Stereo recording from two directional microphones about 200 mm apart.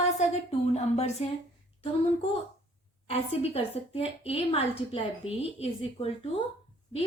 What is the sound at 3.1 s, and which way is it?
Speech, 30° left (ahead or behind).